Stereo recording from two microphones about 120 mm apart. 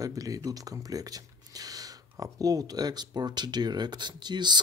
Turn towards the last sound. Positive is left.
turn(degrees=-40)  # may be behind; listen again after turning